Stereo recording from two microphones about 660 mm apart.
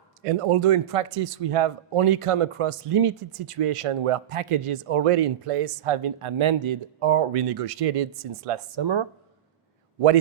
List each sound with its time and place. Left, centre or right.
0.3 s speech: right